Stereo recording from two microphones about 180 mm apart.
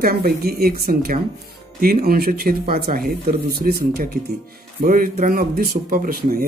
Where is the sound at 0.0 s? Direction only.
55° right (ahead or behind).